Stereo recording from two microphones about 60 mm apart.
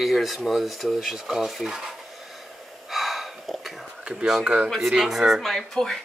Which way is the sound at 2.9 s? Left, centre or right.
Centre.